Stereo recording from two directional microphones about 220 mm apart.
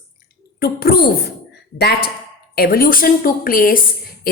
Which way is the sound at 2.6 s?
45° left (ahead or behind).